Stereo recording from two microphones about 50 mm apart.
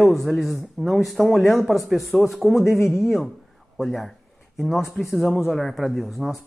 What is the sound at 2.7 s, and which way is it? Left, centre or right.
Speech, left.